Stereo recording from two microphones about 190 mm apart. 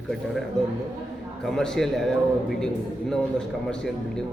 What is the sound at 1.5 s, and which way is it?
Speech, centre (ahead or behind).